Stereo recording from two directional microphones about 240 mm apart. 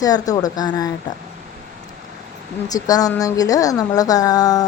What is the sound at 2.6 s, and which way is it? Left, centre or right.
Speech, centre.